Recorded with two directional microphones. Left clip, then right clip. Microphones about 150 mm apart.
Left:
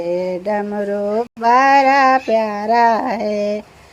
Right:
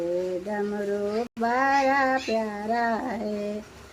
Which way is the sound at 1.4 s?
30° left (ahead or behind).